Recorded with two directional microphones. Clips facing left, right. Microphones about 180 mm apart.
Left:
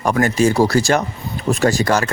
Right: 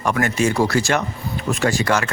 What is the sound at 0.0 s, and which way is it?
Speech, 35° left (ahead or behind).